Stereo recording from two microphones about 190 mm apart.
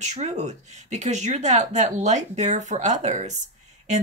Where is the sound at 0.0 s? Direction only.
35° right (ahead or behind).